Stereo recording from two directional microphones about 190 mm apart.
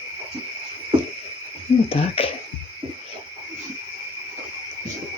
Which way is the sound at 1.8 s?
30° left (ahead or behind).